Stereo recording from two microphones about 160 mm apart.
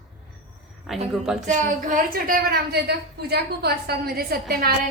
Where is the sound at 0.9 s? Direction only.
Centre (ahead or behind).